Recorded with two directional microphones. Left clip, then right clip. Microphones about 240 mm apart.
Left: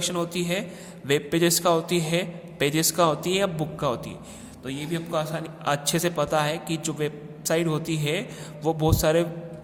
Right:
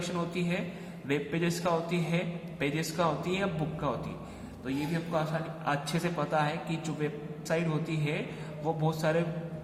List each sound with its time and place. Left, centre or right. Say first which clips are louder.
0.3 s a man's voice: left 6 dB; left
5.1 s a man's voice: left 4 dB; left